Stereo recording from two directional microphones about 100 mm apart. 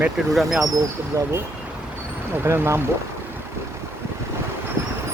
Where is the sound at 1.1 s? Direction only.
30° right (ahead or behind).